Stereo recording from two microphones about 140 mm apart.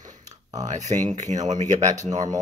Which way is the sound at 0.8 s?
55° right (ahead or behind).